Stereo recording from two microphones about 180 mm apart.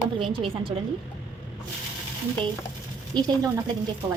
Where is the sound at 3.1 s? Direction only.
20° right (ahead or behind).